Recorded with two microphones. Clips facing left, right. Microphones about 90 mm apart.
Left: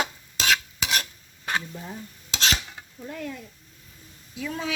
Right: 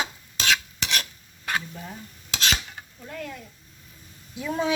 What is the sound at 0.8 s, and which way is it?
Stir, 10° left (ahead or behind).